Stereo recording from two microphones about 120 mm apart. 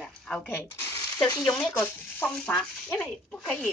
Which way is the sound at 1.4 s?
5° left (ahead or behind).